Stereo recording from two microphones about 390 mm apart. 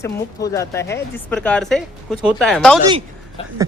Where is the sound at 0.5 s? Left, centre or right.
Centre.